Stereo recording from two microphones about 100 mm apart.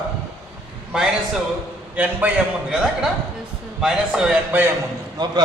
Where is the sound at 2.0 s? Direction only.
10° right (ahead or behind).